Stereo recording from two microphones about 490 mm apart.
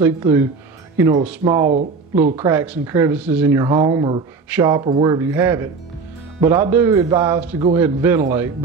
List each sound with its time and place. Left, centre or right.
0.0 s speech: centre